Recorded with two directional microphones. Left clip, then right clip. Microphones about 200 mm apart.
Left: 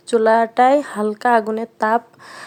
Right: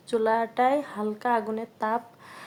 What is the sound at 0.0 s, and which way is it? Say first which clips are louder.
Speech: left 10 dB; 35° left (ahead or behind).